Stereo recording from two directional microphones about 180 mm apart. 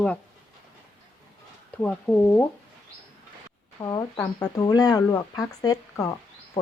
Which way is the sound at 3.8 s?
15° left (ahead or behind).